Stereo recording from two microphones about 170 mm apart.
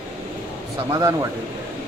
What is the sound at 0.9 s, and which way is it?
Speech, 20° right (ahead or behind).